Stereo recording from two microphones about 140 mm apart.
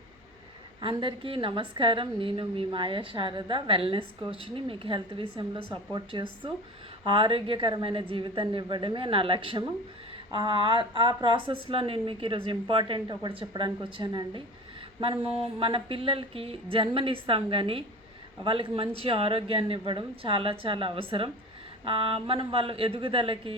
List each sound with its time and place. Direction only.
0.8 s a woman's voice: 35° right (ahead or behind)
15.5 s a woman's voice: 40° right (ahead or behind)